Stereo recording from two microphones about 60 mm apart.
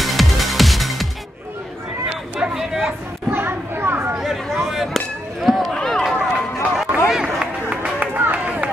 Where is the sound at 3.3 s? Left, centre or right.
Right.